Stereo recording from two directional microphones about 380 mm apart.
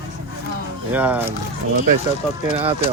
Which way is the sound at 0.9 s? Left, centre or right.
Centre.